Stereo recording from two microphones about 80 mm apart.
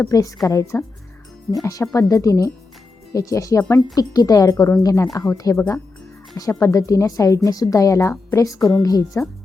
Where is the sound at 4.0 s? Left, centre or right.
Left.